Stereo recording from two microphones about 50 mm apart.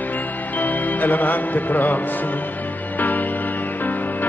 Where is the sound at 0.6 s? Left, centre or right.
Left.